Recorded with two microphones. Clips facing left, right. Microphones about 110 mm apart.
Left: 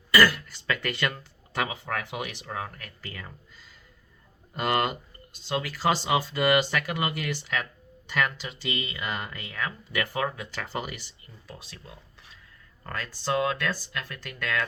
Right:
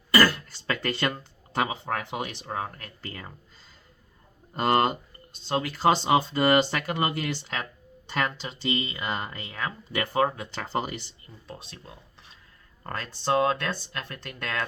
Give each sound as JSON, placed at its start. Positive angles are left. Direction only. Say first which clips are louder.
{"t": 0.1, "sound": "speech", "louder": "even", "side_deg": -30}